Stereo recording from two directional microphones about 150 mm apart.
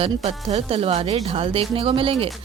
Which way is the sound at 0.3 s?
45° right (ahead or behind).